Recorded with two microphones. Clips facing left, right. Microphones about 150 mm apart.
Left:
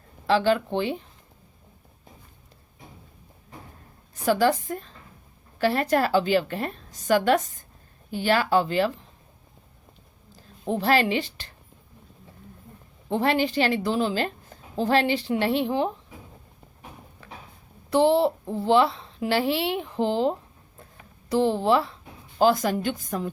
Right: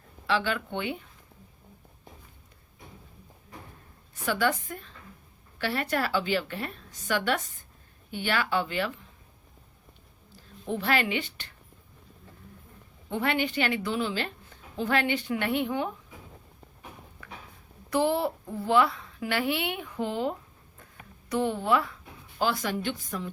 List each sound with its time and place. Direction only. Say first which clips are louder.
0.3 s a woman's voice: left 7 dB; 40° left (ahead or behind)
4.3 s a woman's voice: left 6 dB; 35° left (ahead or behind)
10.7 s a woman's voice: left 5 dB; 35° left (ahead or behind)
13.1 s a woman's voice: left 5 dB; 35° left (ahead or behind)
17.9 s a woman's voice: left 6 dB; 25° left (ahead or behind)
22.4 s a woman's voice: left 8 dB; 40° left (ahead or behind)